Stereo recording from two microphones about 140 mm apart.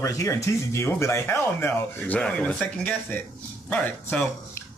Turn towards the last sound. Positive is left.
turn(degrees=10)  # may be behind; listen again after turning